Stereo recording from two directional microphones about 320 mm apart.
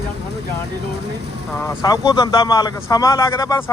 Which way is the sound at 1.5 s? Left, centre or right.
Centre.